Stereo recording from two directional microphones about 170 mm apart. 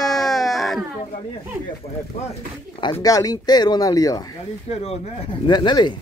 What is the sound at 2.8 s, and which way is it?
Speech, 25° left (ahead or behind).